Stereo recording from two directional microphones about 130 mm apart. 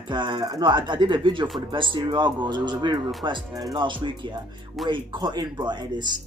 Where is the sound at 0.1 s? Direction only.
40° right (ahead or behind).